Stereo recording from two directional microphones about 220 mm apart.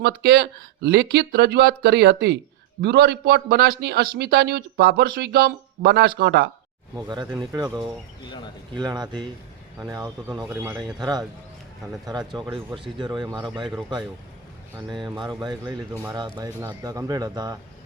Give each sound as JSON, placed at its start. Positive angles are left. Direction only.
{"t": 0.0, "sound": "speech", "side_deg": -50}
{"t": 6.9, "sound": "speech", "side_deg": -20}
{"t": 8.7, "sound": "speech", "side_deg": -20}
{"t": 12.3, "sound": "speech", "side_deg": 0}
{"t": 13.0, "sound": "speech", "side_deg": -20}
{"t": 14.8, "sound": "speech", "side_deg": -20}